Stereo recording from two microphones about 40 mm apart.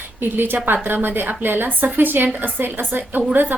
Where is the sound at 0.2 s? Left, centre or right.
Right.